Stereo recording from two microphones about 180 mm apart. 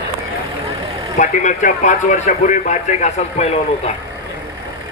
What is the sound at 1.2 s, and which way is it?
Speech, 45° left (ahead or behind).